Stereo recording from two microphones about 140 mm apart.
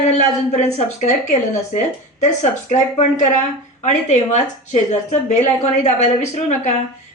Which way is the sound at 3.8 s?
55° left (ahead or behind).